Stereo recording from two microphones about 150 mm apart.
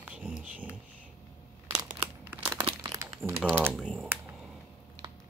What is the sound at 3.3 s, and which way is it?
Speech, 15° right (ahead or behind).